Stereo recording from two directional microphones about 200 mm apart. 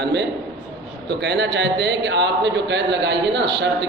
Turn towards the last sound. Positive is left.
turn(degrees=-60)  # may be behind; listen again after turning